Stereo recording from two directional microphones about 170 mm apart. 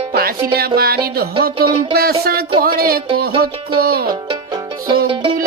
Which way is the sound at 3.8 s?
60° right (ahead or behind).